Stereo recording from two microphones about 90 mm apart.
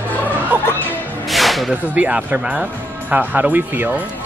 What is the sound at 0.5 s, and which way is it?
Speech, 15° right (ahead or behind).